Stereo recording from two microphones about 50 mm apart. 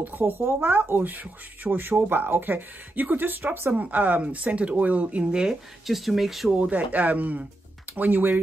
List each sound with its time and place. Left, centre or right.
0.2 s speech: right
3.7 s speech: right
5.9 s speech: centre
6.5 s speech: right